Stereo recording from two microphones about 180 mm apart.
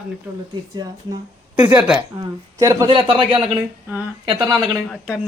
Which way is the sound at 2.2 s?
20° right (ahead or behind).